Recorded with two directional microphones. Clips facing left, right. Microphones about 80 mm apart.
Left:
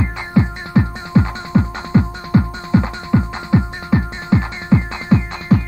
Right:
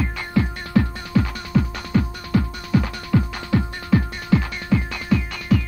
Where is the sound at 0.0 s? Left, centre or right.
Left.